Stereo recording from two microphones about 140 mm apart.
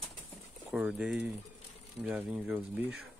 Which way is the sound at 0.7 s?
10° right (ahead or behind).